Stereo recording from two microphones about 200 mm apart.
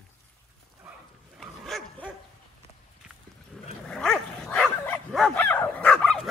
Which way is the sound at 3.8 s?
5° left (ahead or behind).